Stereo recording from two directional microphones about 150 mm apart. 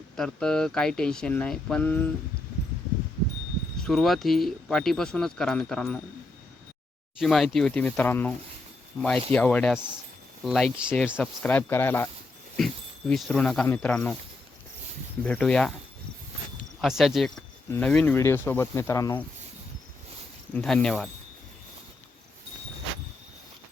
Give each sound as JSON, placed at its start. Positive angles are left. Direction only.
{"t": 0.2, "sound": "speech", "side_deg": 5}
{"t": 3.8, "sound": "speech", "side_deg": 0}
{"t": 7.2, "sound": "speech", "side_deg": 0}
{"t": 11.2, "sound": "speech", "side_deg": 10}
{"t": 12.5, "sound": "speech", "side_deg": 5}
{"t": 15.2, "sound": "speech", "side_deg": 10}
{"t": 16.8, "sound": "speech", "side_deg": 0}
{"t": 20.5, "sound": "speech", "side_deg": 5}